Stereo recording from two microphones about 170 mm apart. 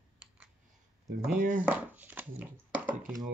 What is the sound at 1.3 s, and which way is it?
Speech, 55° right (ahead or behind).